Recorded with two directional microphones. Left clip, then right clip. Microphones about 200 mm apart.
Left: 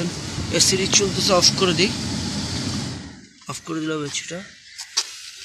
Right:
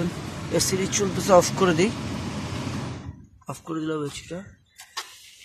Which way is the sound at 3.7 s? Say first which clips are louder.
Left 3 dB; 5° right (ahead or behind).